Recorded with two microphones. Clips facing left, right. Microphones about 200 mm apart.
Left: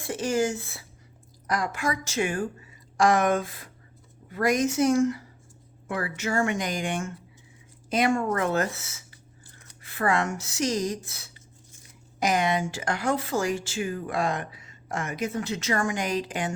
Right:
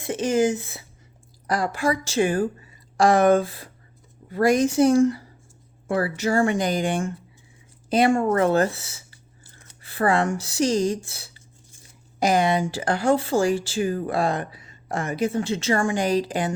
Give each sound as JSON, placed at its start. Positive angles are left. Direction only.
{"t": 0.0, "sound": "speech", "side_deg": -20}
{"t": 1.5, "sound": "speech", "side_deg": -30}